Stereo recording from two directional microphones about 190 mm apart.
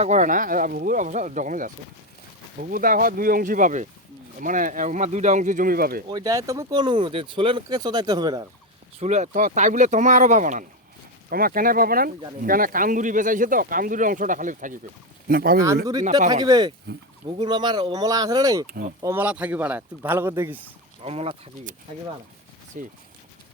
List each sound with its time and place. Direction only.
0.0 s speech: 40° right (ahead or behind)
6.1 s speech: 20° right (ahead or behind)
9.0 s speech: 40° right (ahead or behind)
16.3 s speech: 20° right (ahead or behind)
21.0 s speech: 30° right (ahead or behind)